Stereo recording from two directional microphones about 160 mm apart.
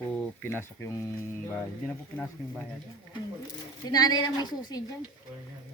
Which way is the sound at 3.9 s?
25° left (ahead or behind).